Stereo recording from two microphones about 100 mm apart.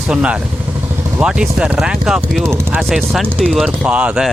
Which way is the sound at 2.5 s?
30° right (ahead or behind).